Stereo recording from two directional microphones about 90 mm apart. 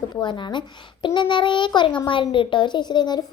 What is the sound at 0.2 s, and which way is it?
A woman's voice, 60° left (ahead or behind).